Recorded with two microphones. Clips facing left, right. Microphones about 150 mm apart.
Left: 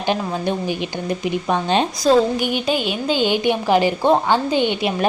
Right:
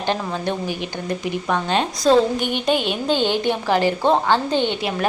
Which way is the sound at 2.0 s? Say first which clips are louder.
Even; 5° left (ahead or behind).